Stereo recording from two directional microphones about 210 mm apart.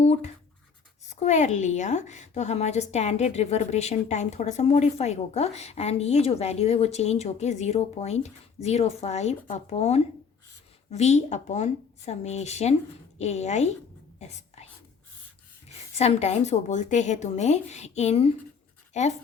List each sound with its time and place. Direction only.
0.0 s a sound: 30° left (ahead or behind)
1.1 s a woman's voice: 35° left (ahead or behind)
14.2 s whispering: 30° left (ahead or behind)
16.0 s a woman's voice: 30° left (ahead or behind)